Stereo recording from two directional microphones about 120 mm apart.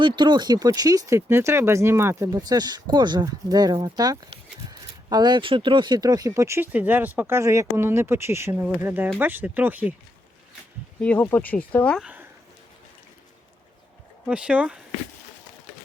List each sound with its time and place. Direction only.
0.0 s speech: 40° right (ahead or behind); by 9.9 s 15° right (ahead or behind)
11.0 s speech: 10° left (ahead or behind)
14.3 s speech: 10° right (ahead or behind)